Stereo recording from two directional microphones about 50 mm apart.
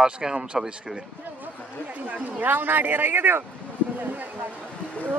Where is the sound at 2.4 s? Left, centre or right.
Right.